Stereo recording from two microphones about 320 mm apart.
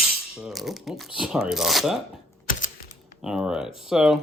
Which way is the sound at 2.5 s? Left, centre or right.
Left.